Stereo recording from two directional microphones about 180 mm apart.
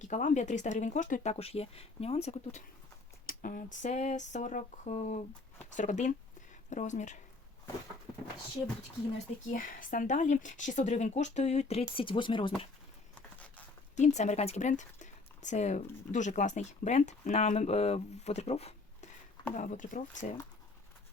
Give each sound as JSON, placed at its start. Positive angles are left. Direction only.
{"t": 0.1, "sound": "speech", "side_deg": 45}
{"t": 3.2, "sound": "speech", "side_deg": 50}
{"t": 9.5, "sound": "speech", "side_deg": 50}
{"t": 13.9, "sound": "speech", "side_deg": 40}